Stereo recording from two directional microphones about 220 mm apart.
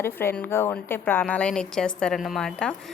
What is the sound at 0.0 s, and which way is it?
A woman's voice, 10° left (ahead or behind).